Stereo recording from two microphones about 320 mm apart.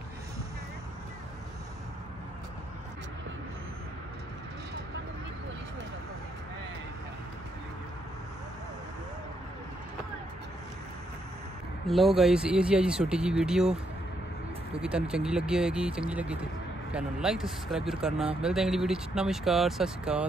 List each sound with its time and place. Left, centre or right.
11.9 s speech: centre
14.8 s speech: centre